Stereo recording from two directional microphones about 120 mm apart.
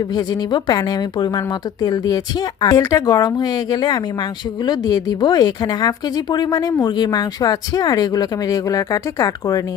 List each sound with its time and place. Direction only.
0.5 s speech: 35° left (ahead or behind)